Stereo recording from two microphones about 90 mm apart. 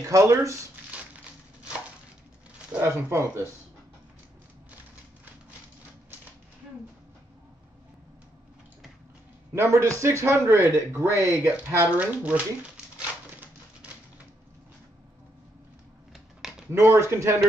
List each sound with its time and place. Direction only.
0.0 s a man's voice: 35° right (ahead or behind)
0.9 s crushing: 15° right (ahead or behind)
2.9 s a man's voice: 30° right (ahead or behind)
9.6 s a man's voice: 30° right (ahead or behind)
10.2 s speech: 25° right (ahead or behind)
16.1 s a sound: 5° right (ahead or behind)
16.7 s a man's voice: 30° right (ahead or behind)